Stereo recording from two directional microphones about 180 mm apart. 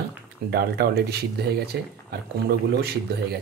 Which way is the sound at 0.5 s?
60° right (ahead or behind).